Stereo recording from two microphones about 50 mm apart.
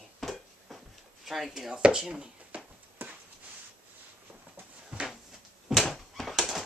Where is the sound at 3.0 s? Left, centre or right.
Right.